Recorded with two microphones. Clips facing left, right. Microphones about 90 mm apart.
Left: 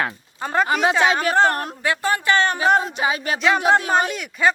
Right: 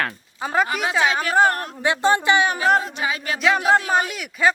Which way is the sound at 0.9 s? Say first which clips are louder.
Right 3 dB; centre (ahead or behind).